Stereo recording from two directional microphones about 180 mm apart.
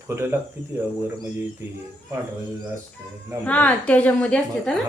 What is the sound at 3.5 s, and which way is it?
A woman's voice, 10° left (ahead or behind).